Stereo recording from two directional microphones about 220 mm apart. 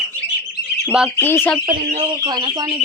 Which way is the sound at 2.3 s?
20° right (ahead or behind).